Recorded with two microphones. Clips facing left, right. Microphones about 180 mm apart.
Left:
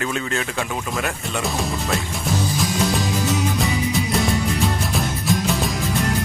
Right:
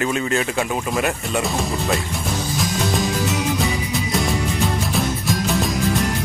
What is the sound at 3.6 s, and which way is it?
Music, centre (ahead or behind).